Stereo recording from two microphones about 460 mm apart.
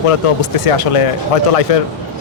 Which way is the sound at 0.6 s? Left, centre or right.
Left.